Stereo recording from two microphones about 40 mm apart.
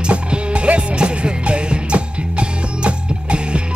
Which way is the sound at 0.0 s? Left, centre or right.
Right.